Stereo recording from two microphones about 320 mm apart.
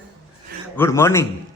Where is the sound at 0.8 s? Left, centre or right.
Centre.